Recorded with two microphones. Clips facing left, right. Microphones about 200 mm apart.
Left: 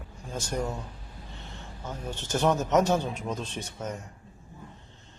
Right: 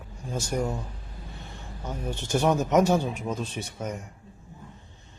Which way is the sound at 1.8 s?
15° right (ahead or behind).